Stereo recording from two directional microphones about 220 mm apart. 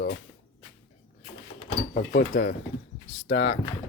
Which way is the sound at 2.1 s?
50° left (ahead or behind).